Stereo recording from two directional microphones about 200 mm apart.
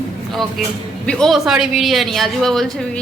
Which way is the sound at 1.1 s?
Centre (ahead or behind).